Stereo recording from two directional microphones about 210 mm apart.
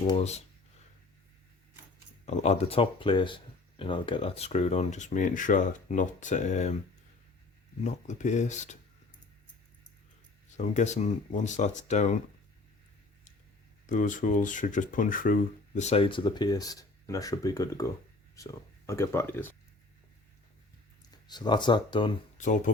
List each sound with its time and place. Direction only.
0.1 s speech: 30° left (ahead or behind)
2.2 s speech: 35° left (ahead or behind)
7.9 s speech: 35° left (ahead or behind)
10.6 s speech: 35° left (ahead or behind)
13.8 s speech: 40° left (ahead or behind); by 19.5 s 10° left (ahead or behind)
21.2 s speech: 20° left (ahead or behind)
22.4 s speech: 35° left (ahead or behind)